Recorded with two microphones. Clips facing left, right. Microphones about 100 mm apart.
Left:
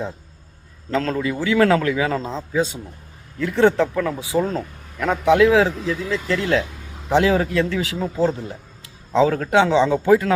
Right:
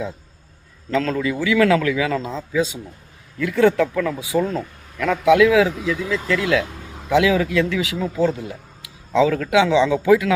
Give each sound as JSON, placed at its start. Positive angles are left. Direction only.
{"t": 0.9, "sound": "a man's voice", "side_deg": 35}